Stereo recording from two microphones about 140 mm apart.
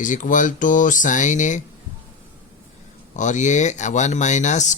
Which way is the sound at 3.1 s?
60° left (ahead or behind).